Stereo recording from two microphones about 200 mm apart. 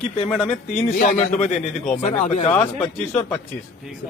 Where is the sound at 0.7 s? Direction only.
40° left (ahead or behind).